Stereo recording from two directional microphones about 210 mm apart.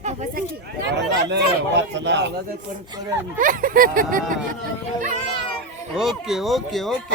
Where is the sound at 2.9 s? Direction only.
20° right (ahead or behind).